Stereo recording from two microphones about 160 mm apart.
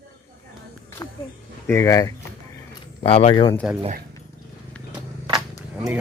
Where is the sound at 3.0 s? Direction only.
40° left (ahead or behind).